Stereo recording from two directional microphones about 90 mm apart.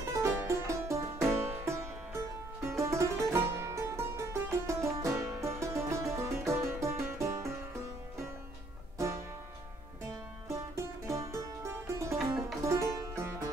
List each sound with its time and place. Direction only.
0.0 s music: 35° right (ahead or behind)
8.9 s music: 35° right (ahead or behind)
10.5 s music: 35° right (ahead or behind)